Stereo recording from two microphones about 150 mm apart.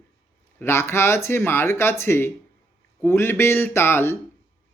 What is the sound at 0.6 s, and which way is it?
Speech, 15° left (ahead or behind).